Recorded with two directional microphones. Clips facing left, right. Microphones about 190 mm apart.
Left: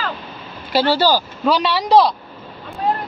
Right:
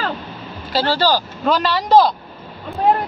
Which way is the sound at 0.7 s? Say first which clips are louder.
Left 2 dB; 10° left (ahead or behind).